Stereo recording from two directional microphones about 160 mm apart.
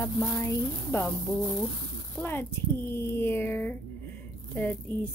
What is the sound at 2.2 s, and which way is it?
Speech, 15° left (ahead or behind).